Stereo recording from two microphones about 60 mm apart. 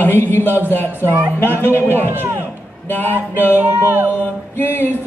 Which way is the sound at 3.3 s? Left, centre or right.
Left.